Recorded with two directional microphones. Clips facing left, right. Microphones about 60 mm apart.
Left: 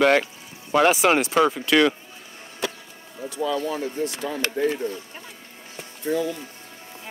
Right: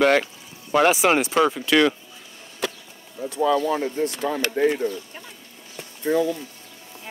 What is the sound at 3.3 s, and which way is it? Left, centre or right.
Speech, right.